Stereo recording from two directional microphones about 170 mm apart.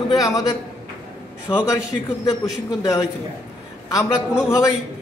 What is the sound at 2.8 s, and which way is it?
Speech, 20° left (ahead or behind).